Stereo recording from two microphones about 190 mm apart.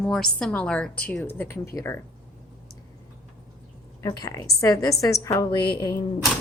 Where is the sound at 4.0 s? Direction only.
20° left (ahead or behind).